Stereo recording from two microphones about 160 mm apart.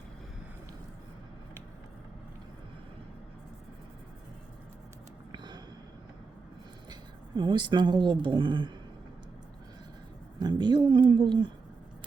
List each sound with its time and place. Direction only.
5.3 s a sound: 25° right (ahead or behind)
7.3 s a woman's voice: 30° right (ahead or behind)
10.4 s a woman's voice: 30° right (ahead or behind)